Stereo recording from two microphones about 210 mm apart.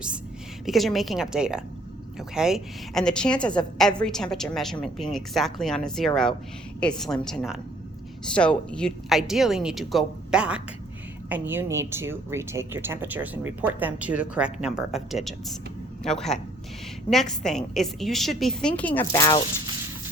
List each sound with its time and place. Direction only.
0.6 s a woman's voice: centre (ahead or behind)
19.1 s speech: 20° left (ahead or behind)